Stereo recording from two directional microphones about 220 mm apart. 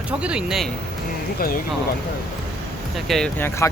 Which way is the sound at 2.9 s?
Centre (ahead or behind).